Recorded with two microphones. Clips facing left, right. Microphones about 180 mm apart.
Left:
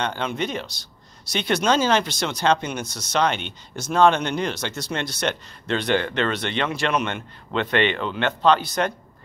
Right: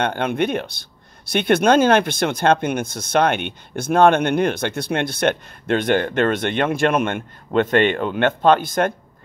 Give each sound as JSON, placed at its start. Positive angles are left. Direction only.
{"t": 0.0, "sound": "speech", "side_deg": -55}